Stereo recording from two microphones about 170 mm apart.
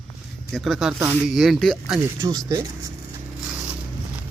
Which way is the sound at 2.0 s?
20° right (ahead or behind).